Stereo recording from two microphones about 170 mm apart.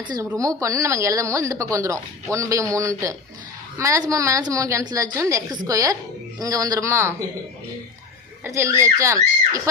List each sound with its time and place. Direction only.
0.3 s a woman's voice: 20° right (ahead or behind)
8.4 s a woman's voice: 15° right (ahead or behind)